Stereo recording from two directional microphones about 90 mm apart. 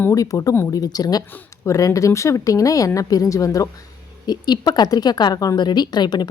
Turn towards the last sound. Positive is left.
turn(degrees=50)  # may be behind; listen again after turning